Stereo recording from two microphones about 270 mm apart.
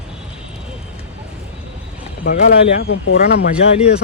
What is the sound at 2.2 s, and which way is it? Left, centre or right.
Speech, left.